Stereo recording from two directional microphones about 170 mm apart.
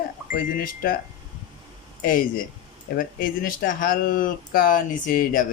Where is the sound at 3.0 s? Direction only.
55° left (ahead or behind).